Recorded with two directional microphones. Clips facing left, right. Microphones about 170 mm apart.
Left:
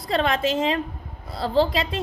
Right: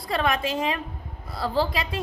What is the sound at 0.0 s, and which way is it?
A woman's voice, 25° left (ahead or behind).